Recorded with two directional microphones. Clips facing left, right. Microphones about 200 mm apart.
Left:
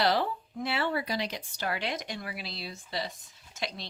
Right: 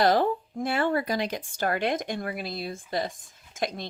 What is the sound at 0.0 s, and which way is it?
Speech, 50° right (ahead or behind).